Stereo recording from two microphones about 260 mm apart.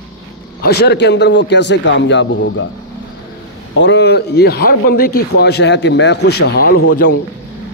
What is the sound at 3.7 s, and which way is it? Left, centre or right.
Speech, left.